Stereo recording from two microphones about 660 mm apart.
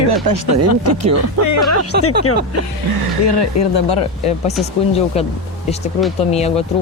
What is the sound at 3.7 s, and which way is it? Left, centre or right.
Speech, left.